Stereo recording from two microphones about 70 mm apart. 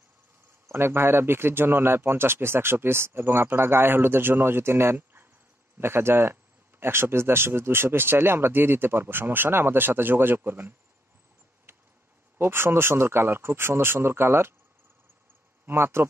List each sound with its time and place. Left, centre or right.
0.7 s speech: right
11.7 s a sound: right
12.4 s speech: right
15.6 s speech: right